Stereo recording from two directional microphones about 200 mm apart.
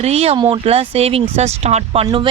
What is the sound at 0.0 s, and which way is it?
Speech, 30° right (ahead or behind).